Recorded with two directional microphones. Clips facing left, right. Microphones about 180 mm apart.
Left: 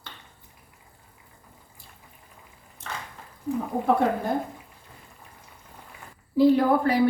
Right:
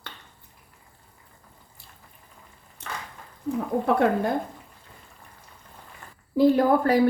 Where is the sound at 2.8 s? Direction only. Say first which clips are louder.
Even; 70° right (ahead or behind).